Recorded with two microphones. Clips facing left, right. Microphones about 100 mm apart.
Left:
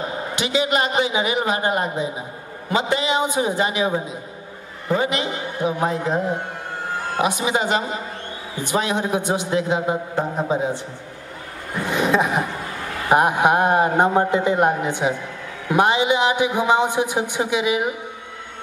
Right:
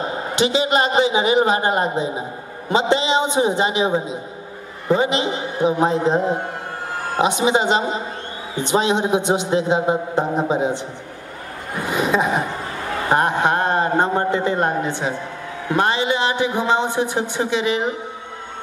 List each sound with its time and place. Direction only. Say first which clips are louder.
0.0 s a man's voice: right 5 dB; 30° right (ahead or behind)
11.9 s a sound: even; centre (ahead or behind)
13.1 s a man's voice: left 2 dB; 10° left (ahead or behind)